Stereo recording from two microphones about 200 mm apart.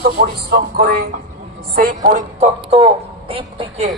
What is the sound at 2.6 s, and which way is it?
A woman's voice, 30° right (ahead or behind).